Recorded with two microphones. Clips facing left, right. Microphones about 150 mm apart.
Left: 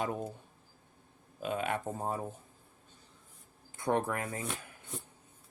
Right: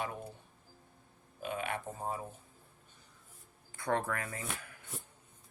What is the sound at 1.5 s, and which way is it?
Speech, 45° left (ahead or behind).